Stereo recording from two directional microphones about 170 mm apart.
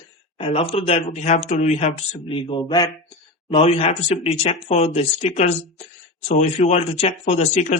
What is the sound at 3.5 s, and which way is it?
Speech, 35° left (ahead or behind).